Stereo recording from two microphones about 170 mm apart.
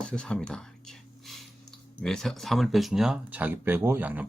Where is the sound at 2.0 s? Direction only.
5° left (ahead or behind).